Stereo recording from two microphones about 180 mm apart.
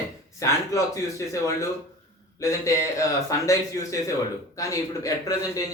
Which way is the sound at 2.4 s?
20° left (ahead or behind).